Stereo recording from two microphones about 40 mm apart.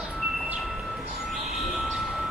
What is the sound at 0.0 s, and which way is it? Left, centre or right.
Wind chime, centre.